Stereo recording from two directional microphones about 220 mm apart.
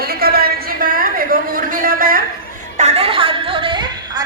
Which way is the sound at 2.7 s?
30° right (ahead or behind).